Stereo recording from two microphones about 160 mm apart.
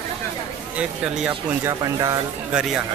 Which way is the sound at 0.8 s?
5° right (ahead or behind).